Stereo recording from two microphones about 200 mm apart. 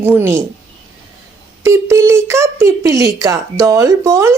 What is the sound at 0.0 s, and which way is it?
Speech, 10° right (ahead or behind).